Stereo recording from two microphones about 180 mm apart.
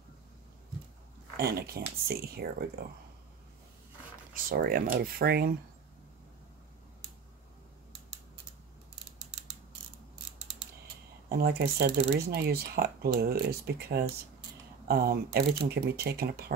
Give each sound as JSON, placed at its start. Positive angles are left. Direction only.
{"t": 1.3, "sound": "speech", "side_deg": -60}
{"t": 4.3, "sound": "speech", "side_deg": -50}
{"t": 11.2, "sound": "speech", "side_deg": -60}